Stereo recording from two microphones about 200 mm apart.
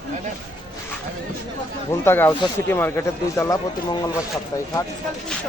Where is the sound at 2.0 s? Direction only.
10° left (ahead or behind).